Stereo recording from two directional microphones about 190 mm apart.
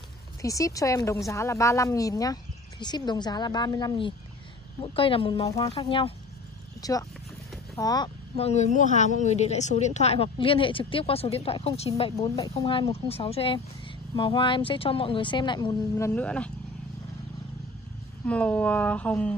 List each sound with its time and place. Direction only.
0.4 s a woman's voice: 15° left (ahead or behind)
8.4 s a woman's voice: 35° left (ahead or behind)
16.1 s a woman's voice: 5° left (ahead or behind)
18.2 s a woman's voice: 5° left (ahead or behind)